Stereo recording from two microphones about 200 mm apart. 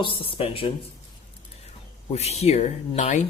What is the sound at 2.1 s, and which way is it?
Speech, 30° left (ahead or behind).